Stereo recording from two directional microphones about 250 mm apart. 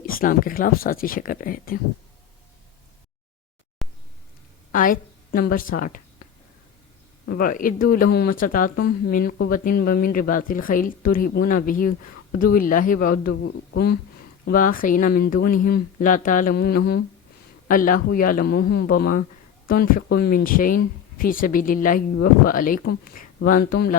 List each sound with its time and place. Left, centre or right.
0.0 s speech: left
3.8 s a sound: centre
4.7 s a woman's voice: left
7.3 s speech: left